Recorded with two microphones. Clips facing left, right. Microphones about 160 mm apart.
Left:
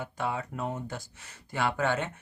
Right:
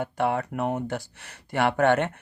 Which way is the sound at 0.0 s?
60° right (ahead or behind).